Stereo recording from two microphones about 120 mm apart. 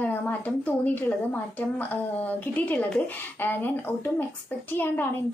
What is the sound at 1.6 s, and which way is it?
A woman's voice, 15° left (ahead or behind).